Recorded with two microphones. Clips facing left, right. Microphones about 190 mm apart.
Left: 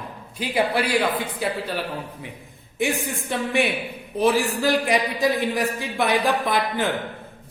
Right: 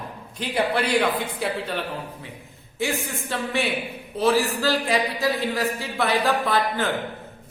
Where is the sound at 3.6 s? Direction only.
15° left (ahead or behind).